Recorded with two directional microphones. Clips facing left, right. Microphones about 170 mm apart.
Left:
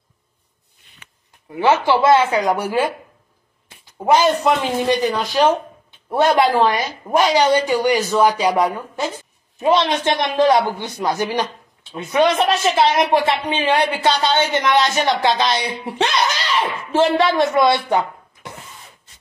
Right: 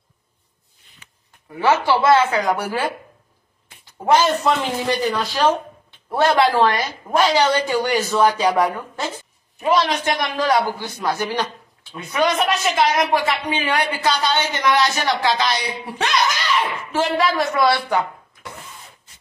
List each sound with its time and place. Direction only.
1.6 s a woman's voice: 20° left (ahead or behind)
4.0 s speech: 15° left (ahead or behind)
9.6 s a woman's voice: 25° left (ahead or behind)